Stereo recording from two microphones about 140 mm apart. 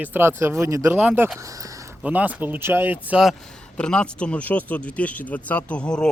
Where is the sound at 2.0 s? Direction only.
10° right (ahead or behind).